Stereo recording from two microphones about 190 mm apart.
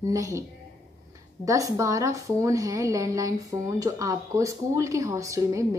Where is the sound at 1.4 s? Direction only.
15° right (ahead or behind).